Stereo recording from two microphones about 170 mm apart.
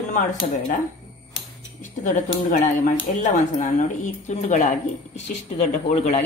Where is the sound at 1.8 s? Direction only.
45° left (ahead or behind).